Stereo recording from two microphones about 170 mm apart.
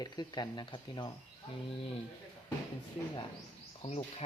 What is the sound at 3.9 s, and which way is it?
Speech, 35° left (ahead or behind).